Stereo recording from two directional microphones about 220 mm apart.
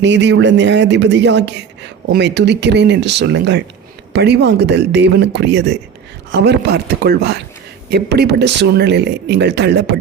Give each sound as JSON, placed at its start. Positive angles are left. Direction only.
{"t": 0.0, "sound": "speech", "side_deg": -55}